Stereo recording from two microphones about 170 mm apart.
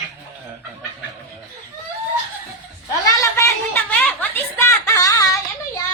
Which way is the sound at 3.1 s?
20° left (ahead or behind).